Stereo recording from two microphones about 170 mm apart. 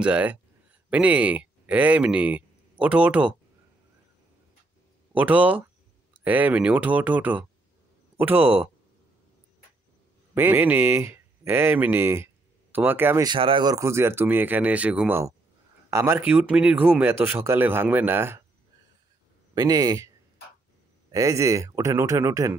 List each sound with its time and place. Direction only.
0.0 s a man's voice: 5° right (ahead or behind)
5.1 s a man's voice: 10° right (ahead or behind)
10.3 s a man's voice: 10° right (ahead or behind)
13.3 s a man's voice: 30° right (ahead or behind); by 18.4 s 15° right (ahead or behind)
19.5 s speech: 20° right (ahead or behind)
21.1 s speech: 20° right (ahead or behind)